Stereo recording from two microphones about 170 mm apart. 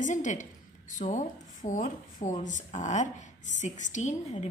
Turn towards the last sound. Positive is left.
turn(degrees=40)  # may be behind; listen again after turning